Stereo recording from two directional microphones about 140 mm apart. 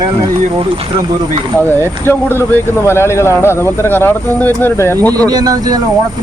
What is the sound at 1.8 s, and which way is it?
Speech, 15° left (ahead or behind).